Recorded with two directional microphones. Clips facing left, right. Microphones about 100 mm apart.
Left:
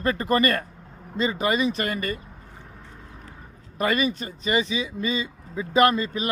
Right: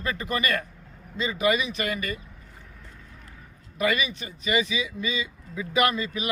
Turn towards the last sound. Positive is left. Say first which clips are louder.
# left 5 dB
turn(degrees=35)  # may be behind; listen again after turning